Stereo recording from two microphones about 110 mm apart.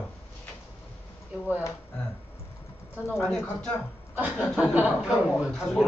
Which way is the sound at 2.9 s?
20° left (ahead or behind).